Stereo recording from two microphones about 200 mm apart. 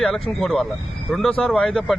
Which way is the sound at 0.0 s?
Centre (ahead or behind).